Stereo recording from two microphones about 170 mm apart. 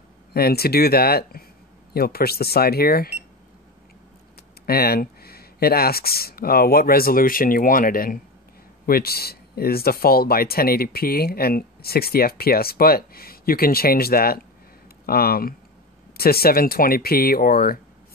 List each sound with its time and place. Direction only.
0.3 s speech: 65° left (ahead or behind)
4.6 s speech: 65° left (ahead or behind)